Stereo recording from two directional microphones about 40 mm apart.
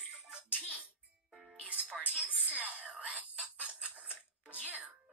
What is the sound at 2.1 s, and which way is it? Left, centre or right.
Speech, right.